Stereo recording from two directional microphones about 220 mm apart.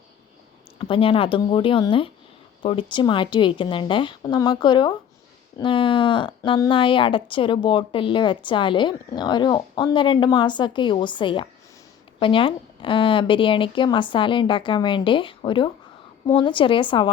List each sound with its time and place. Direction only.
0.8 s speech: 25° left (ahead or behind)